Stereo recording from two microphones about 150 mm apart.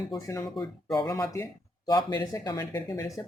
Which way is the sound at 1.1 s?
20° left (ahead or behind).